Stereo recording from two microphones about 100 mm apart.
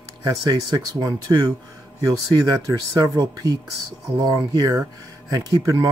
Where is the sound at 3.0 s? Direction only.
40° right (ahead or behind).